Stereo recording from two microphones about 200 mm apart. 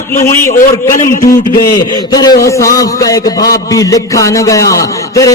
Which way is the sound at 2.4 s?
15° left (ahead or behind).